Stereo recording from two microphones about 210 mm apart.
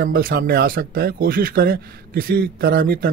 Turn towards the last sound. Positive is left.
turn(degrees=-45)  # may be behind; listen again after turning